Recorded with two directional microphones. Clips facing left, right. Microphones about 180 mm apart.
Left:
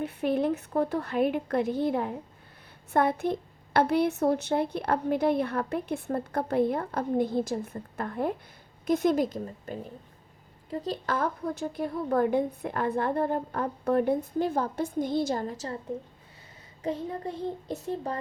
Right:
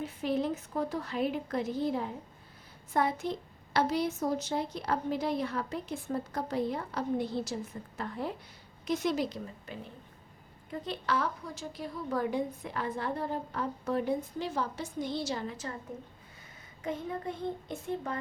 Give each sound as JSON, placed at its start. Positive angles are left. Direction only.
{"t": 0.0, "sound": "a woman's voice", "side_deg": 60}
{"t": 16.8, "sound": "child singing", "side_deg": 35}